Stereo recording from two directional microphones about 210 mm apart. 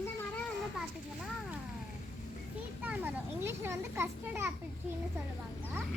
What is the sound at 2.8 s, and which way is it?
Children playing, 10° right (ahead or behind).